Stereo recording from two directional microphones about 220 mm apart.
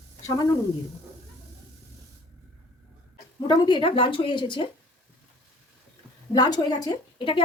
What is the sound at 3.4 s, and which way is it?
A woman's voice, 20° left (ahead or behind).